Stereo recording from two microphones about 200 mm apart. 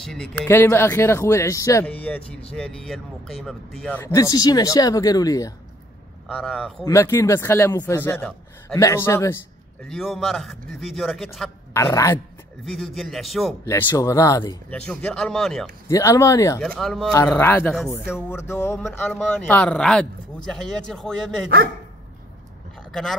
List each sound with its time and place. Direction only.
0.0 s speech: centre (ahead or behind); by 5.5 s 20° left (ahead or behind)
6.2 s speech: 5° left (ahead or behind)
9.8 s a man's voice: centre (ahead or behind)
11.7 s speech: 15° left (ahead or behind)
12.6 s a man's voice: centre (ahead or behind)
13.7 s speech: 15° left (ahead or behind)
14.7 s a man's voice: 5° left (ahead or behind)
15.9 s speech: 15° left (ahead or behind)
16.6 s a man's voice: 5° left (ahead or behind)
22.8 s speech: centre (ahead or behind)